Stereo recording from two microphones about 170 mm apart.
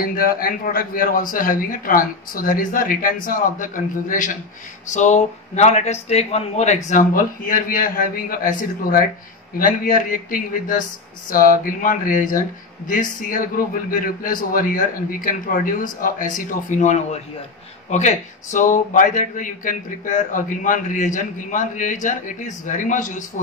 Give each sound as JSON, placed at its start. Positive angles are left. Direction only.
{"t": 0.0, "sound": "a man's voice", "side_deg": 60}